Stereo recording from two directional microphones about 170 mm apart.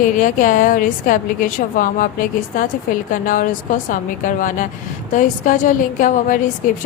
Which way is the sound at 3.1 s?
50° left (ahead or behind).